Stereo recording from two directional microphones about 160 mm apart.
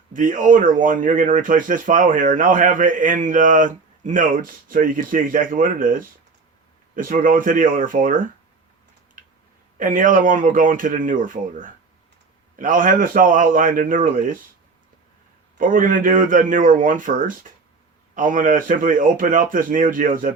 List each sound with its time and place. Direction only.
0.1 s speech: 55° right (ahead or behind)
9.7 s speech: 55° right (ahead or behind)
15.5 s speech: 60° right (ahead or behind)